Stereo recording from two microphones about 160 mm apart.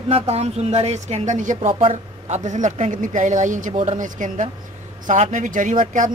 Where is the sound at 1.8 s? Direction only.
40° right (ahead or behind).